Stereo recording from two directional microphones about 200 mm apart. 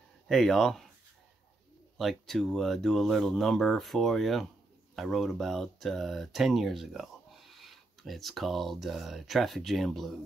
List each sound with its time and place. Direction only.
0.3 s speech: centre (ahead or behind)
2.0 s speech: centre (ahead or behind)